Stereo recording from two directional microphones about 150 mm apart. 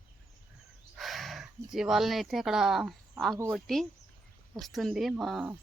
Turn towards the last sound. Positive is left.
turn(degrees=0)  # may be behind; listen again after turning